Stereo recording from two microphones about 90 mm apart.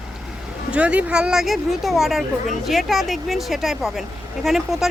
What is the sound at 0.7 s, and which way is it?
A woman's voice, 15° right (ahead or behind).